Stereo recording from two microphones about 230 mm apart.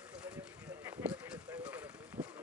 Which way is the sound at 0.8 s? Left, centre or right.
Centre.